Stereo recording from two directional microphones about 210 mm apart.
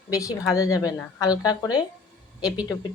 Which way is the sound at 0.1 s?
15° left (ahead or behind).